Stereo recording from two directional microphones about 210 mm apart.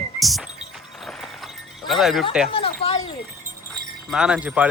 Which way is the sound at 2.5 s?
25° left (ahead or behind).